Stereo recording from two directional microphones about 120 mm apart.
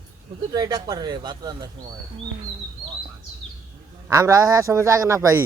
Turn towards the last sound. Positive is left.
turn(degrees=-25)  # may be behind; listen again after turning